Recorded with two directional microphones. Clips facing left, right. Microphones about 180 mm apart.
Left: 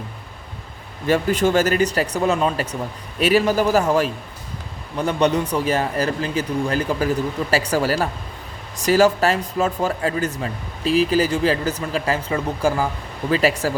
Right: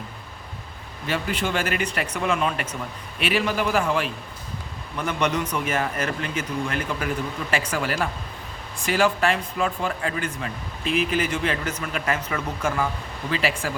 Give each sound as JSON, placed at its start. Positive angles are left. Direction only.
{"t": 1.0, "sound": "speech", "side_deg": 45}